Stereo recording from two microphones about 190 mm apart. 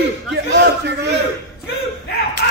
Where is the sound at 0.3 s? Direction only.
65° right (ahead or behind).